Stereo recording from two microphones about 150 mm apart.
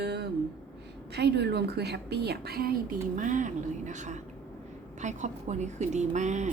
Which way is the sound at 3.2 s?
55° right (ahead or behind).